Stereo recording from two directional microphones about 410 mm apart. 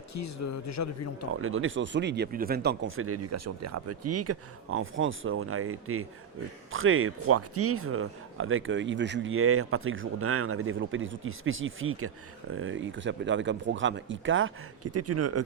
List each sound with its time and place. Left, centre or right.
0.1 s a man's voice: left
1.3 s speech: right